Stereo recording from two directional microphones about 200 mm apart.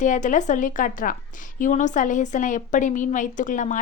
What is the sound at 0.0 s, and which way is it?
A woman's voice, 40° left (ahead or behind).